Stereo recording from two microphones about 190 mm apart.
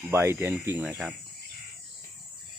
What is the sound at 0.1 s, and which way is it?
Speech, 15° right (ahead or behind).